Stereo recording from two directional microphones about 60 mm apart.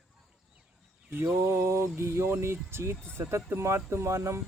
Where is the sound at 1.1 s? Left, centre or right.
Right.